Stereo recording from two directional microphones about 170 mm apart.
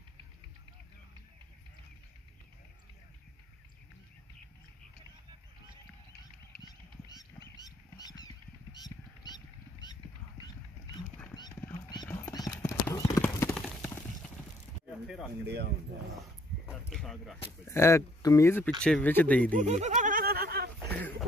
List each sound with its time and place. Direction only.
6.6 s goose: 20° left (ahead or behind)
8.7 s a sound: 25° left (ahead or behind)
11.6 s clip-clop: 25° left (ahead or behind)
15.4 s speech: 75° right (ahead or behind)
16.5 s a sound: 70° right (ahead or behind)
16.9 s speech: centre (ahead or behind)
17.6 s speech: 15° left (ahead or behind)
19.5 s snicker: 45° right (ahead or behind); by 20.7 s 65° right (ahead or behind)